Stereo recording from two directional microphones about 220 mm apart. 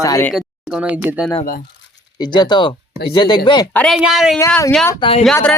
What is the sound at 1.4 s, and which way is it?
Speech, 40° left (ahead or behind).